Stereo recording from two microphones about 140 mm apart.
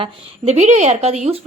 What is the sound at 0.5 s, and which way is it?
Speech, 55° right (ahead or behind).